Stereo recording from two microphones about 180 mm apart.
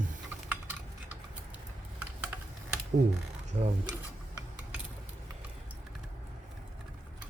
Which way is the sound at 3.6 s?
35° right (ahead or behind).